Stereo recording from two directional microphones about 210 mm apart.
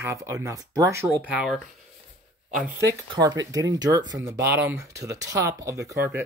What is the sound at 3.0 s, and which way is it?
Speech, 20° right (ahead or behind).